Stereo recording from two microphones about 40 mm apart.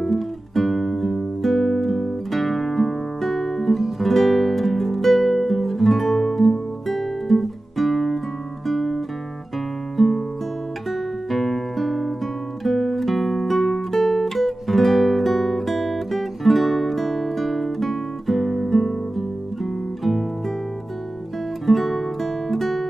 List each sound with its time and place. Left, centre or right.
0.0 s music: centre
10.9 s guitar: centre
12.6 s music: centre
21.6 s music: centre